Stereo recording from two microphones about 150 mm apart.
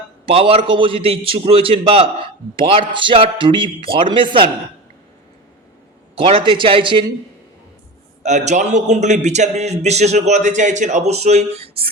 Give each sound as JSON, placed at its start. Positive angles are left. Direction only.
{"t": 0.3, "sound": "speech", "side_deg": -40}
{"t": 6.1, "sound": "speech", "side_deg": -40}
{"t": 8.2, "sound": "a man's voice", "side_deg": -50}